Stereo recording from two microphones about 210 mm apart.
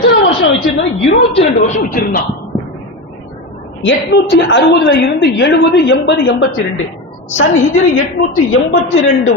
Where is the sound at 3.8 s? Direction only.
60° left (ahead or behind).